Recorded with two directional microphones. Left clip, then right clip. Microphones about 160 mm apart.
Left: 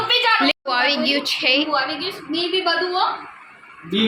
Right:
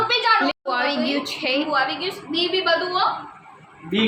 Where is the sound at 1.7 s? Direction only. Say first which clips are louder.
Even; 10° left (ahead or behind).